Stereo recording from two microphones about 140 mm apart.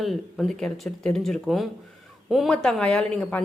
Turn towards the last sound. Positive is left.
turn(degrees=5)  # may be behind; listen again after turning